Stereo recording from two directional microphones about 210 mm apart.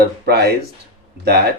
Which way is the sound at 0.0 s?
50° right (ahead or behind).